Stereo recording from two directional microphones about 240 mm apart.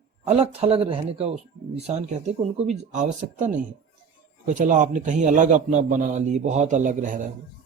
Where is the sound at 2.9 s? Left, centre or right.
Right.